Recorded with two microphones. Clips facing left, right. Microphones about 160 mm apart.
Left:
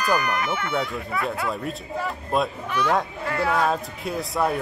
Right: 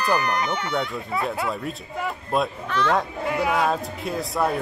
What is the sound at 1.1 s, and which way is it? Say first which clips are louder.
Speech: right 2 dB; 25° right (ahead or behind).